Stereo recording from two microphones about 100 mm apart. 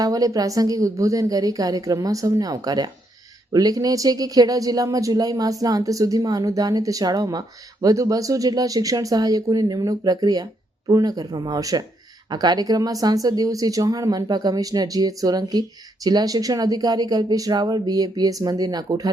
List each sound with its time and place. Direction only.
0.0 s speech: 35° right (ahead or behind)